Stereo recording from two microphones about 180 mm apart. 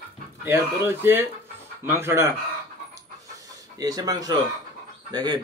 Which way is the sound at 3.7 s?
20° right (ahead or behind).